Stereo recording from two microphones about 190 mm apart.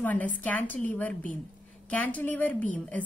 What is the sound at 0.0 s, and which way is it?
A woman's voice, 10° left (ahead or behind).